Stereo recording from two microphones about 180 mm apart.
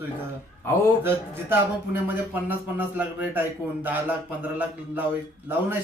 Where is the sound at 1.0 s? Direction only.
10° right (ahead or behind).